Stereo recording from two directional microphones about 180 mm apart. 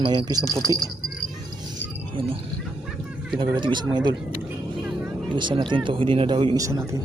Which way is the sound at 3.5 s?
25° right (ahead or behind).